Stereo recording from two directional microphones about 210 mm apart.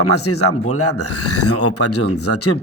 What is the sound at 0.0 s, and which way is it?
Speech, 90° left.